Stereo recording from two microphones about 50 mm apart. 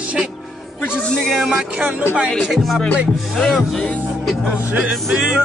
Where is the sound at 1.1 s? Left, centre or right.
Centre.